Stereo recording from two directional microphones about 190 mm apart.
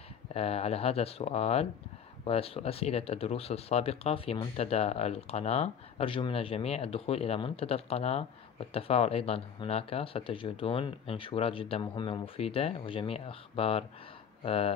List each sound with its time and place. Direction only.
0.3 s speech: 30° left (ahead or behind)